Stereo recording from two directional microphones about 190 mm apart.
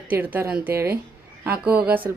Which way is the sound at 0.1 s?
10° right (ahead or behind).